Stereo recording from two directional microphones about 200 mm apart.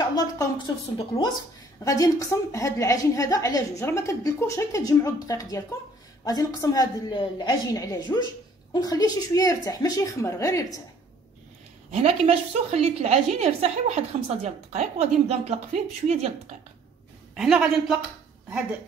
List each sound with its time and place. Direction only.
0.1 s a woman's voice: 20° left (ahead or behind)
11.9 s a woman's voice: 35° right (ahead or behind)
17.4 s a man's voice: 5° right (ahead or behind)